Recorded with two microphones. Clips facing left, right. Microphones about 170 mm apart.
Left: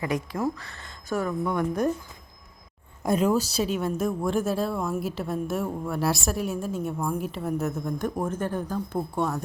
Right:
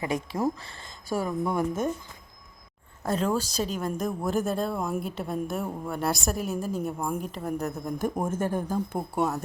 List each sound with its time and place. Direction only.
0.0 s speech: 20° right (ahead or behind)
1.1 s speech: 10° right (ahead or behind)
3.0 s a woman's voice: 10° left (ahead or behind); by 9.4 s 5° right (ahead or behind)